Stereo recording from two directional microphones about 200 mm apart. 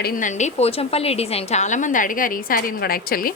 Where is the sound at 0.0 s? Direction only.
40° left (ahead or behind).